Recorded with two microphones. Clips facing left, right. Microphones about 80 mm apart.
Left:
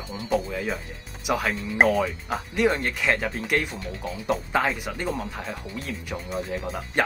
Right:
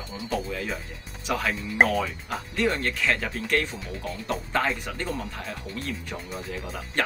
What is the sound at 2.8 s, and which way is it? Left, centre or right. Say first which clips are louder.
Speech: left 2 dB; centre.